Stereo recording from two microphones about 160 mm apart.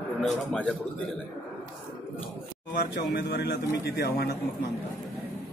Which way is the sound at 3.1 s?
75° left (ahead or behind).